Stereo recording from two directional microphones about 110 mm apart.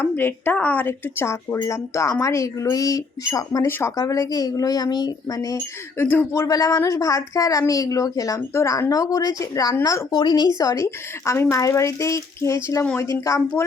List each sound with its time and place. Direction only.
0.0 s speech: 20° left (ahead or behind)
3.7 s speech: 20° left (ahead or behind)
3.9 s speech: 35° left (ahead or behind)
6.0 s speech: 20° left (ahead or behind)